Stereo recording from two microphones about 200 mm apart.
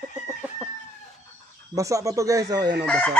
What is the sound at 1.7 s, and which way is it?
Speech, 15° right (ahead or behind).